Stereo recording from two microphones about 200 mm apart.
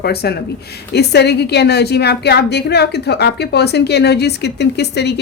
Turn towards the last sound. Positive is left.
turn(degrees=55)  # may be behind; listen again after turning